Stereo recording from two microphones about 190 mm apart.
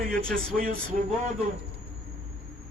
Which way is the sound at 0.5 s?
50° right (ahead or behind).